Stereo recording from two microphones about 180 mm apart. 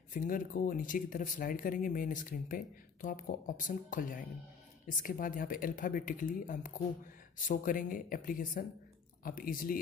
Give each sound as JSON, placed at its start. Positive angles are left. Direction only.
{"t": 0.1, "sound": "speech", "side_deg": 50}